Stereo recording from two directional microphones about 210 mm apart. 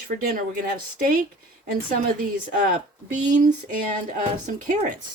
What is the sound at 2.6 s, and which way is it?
Speech, 35° right (ahead or behind).